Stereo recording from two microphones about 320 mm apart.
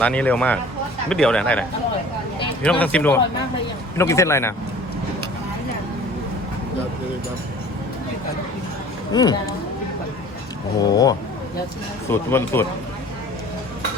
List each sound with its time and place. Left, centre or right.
0.0 s speech: centre
2.6 s speech: centre
9.1 s speech: centre
10.8 s speech: centre